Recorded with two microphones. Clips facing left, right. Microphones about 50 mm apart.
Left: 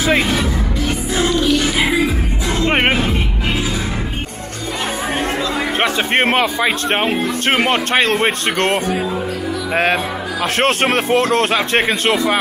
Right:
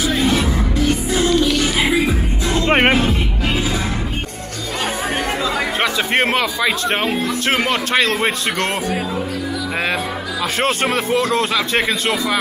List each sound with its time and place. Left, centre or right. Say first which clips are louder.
0.0 s music: left 2 dB; left
0.3 s music: right 1 dB; centre
5.8 s a man's voice: left 3 dB; left
10.6 s speech: left 3 dB; left